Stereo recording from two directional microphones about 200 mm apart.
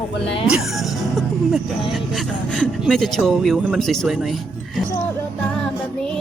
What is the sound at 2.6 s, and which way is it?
Speech, centre (ahead or behind).